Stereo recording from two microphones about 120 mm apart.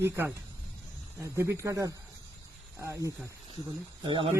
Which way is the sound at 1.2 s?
25° right (ahead or behind).